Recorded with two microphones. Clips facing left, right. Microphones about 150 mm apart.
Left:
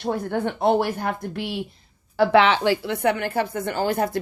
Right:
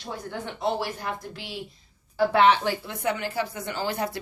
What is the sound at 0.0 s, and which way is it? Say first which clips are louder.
A woman's voice: left 10 dB; 60° left (ahead or behind).